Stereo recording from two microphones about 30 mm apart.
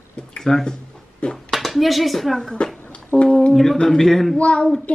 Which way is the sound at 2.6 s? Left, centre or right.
Left.